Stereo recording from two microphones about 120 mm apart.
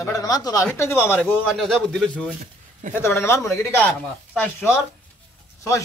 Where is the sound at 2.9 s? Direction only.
20° left (ahead or behind).